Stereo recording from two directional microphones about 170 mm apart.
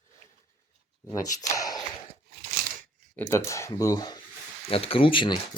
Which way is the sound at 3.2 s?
15° left (ahead or behind).